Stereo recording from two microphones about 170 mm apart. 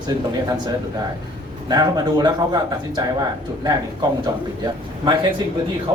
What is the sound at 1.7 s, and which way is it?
A man's voice, 25° right (ahead or behind).